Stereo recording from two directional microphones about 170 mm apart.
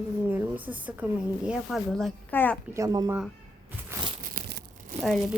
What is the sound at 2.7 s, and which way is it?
Speech, 20° right (ahead or behind).